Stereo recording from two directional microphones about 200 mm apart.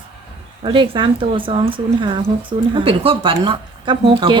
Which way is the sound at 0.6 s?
25° right (ahead or behind).